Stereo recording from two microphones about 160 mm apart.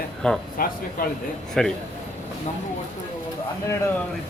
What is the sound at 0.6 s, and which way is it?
Speech, 65° left (ahead or behind).